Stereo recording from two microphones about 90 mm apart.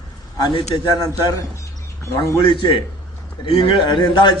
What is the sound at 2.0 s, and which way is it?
Speech, 35° left (ahead or behind).